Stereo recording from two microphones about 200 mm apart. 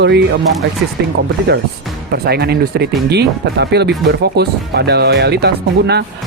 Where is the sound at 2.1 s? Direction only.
50° right (ahead or behind).